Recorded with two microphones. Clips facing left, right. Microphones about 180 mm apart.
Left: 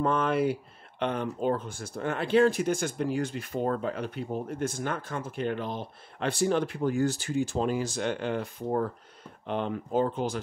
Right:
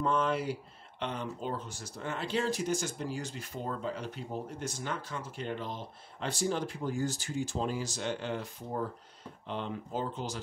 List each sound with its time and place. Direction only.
0.0 s speech: 55° left (ahead or behind)